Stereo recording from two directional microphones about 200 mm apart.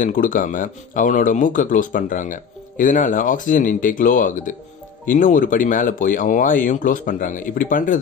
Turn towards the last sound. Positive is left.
turn(degrees=40)  # may be behind; listen again after turning